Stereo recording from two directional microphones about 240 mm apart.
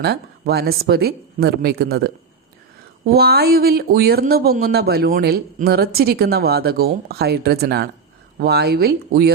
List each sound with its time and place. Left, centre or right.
0.0 s speech: right